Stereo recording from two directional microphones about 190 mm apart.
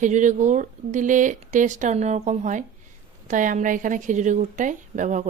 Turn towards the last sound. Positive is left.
turn(degrees=-40)  # may be behind; listen again after turning